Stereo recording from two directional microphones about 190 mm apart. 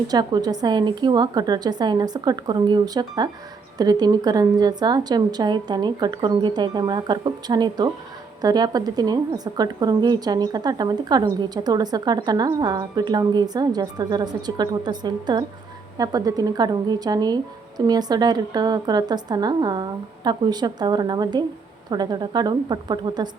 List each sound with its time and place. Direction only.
0.1 s a woman's voice: 20° right (ahead or behind)